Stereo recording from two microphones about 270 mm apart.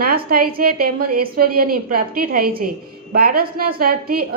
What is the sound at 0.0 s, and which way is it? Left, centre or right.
A woman's voice, right.